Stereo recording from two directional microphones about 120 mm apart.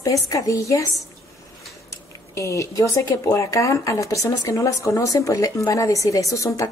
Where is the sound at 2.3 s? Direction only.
25° left (ahead or behind).